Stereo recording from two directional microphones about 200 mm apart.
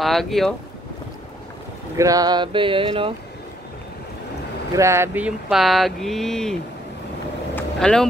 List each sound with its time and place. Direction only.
0.0 s speech: centre (ahead or behind)
2.0 s a sound: 15° right (ahead or behind)
4.7 s speech: 15° right (ahead or behind); by 6.6 s centre (ahead or behind)
7.5 s vehicle: 5° left (ahead or behind)